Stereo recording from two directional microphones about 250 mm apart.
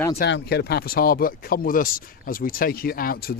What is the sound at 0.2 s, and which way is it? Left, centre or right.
A man's voice, left.